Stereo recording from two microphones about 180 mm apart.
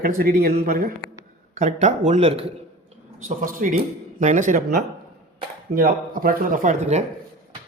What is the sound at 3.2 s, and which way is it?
Speech, 45° right (ahead or behind).